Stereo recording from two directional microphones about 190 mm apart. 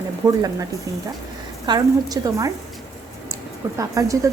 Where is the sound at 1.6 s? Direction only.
20° right (ahead or behind).